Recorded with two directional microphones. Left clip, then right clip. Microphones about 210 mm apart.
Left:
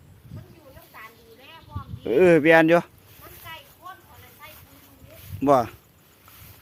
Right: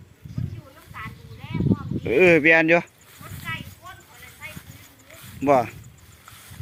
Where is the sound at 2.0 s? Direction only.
5° left (ahead or behind).